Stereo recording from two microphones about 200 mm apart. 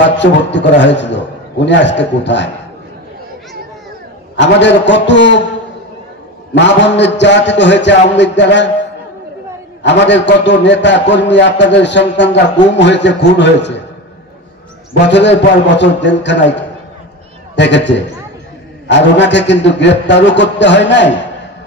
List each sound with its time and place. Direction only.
0.2 s a man's voice: 60° left (ahead or behind)
4.4 s a man's voice: 60° left (ahead or behind)
6.5 s a man's voice: 60° left (ahead or behind)
10.0 s a man's voice: 60° left (ahead or behind)
15.0 s a man's voice: 60° left (ahead or behind)